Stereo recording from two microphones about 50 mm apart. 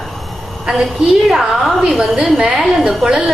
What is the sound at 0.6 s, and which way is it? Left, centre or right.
A woman's voice, centre.